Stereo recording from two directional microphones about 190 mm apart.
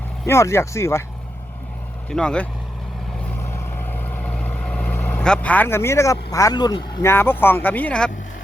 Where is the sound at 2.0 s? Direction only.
5° left (ahead or behind).